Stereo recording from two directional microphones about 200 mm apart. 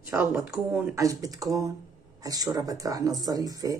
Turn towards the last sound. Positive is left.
turn(degrees=-20)  # may be behind; listen again after turning